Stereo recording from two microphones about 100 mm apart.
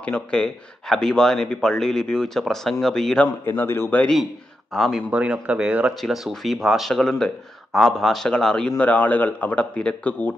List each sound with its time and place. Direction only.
0.0 s speech: 10° left (ahead or behind)
3.4 s a man's voice: 20° left (ahead or behind)
4.0 s speech: 5° left (ahead or behind)
5.1 s speech: 10° right (ahead or behind); by 10.3 s 10° left (ahead or behind)